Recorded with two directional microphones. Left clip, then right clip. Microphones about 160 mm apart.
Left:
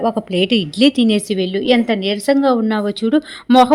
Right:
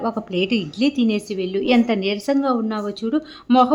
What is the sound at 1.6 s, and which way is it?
Speech, 10° left (ahead or behind).